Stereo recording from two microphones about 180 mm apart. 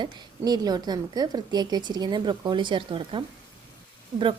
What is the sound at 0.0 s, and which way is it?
A woman's voice, 20° right (ahead or behind).